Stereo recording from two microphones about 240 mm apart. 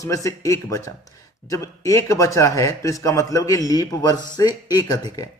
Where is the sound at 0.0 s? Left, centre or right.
Centre.